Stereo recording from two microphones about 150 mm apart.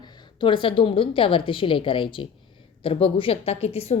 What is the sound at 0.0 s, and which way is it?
A woman's voice, 30° left (ahead or behind).